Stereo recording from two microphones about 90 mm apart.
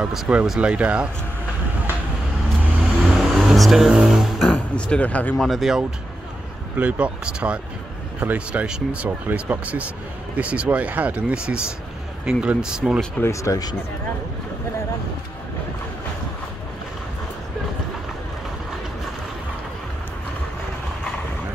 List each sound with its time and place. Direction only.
0.0 s speech: 10° right (ahead or behind)
3.1 s vehicle: 5° right (ahead or behind)
4.7 s speech: 15° left (ahead or behind)
5.4 s speech: centre (ahead or behind)
6.8 s speech: 15° right (ahead or behind)
13.2 s speech: 35° left (ahead or behind)